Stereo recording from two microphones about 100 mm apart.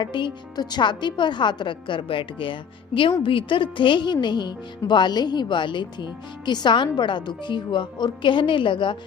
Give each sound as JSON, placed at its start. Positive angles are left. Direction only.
{"t": 0.0, "sound": "a woman's voice", "side_deg": 55}